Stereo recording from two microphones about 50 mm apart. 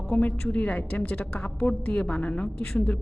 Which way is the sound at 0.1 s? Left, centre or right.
Left.